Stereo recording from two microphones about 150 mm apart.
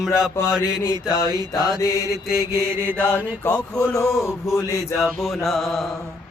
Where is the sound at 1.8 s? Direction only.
20° left (ahead or behind).